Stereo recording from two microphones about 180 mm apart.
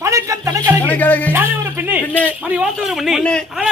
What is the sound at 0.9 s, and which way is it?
Speech, 10° left (ahead or behind).